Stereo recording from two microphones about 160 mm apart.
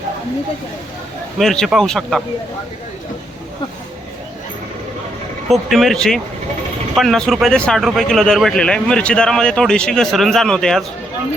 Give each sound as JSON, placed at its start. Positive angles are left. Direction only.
{"t": 1.4, "sound": "speech", "side_deg": 0}
{"t": 5.5, "sound": "speech", "side_deg": 0}